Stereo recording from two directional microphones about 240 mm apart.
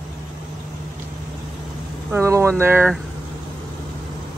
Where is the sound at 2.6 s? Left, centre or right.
Centre.